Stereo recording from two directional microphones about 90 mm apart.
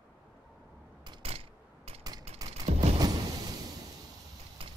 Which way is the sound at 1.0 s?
75° right (ahead or behind).